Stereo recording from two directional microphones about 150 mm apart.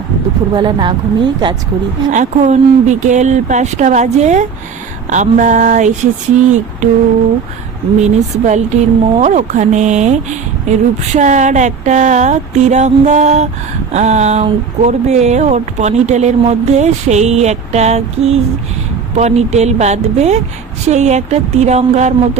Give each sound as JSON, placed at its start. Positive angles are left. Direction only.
{"t": 0.5, "sound": "speech", "side_deg": -30}
{"t": 2.1, "sound": "speech", "side_deg": -50}
{"t": 7.9, "sound": "speech", "side_deg": -50}